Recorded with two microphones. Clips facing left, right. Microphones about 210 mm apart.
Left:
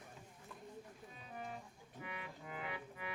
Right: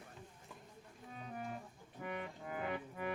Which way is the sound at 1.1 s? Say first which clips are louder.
Right 4 dB; 50° right (ahead or behind).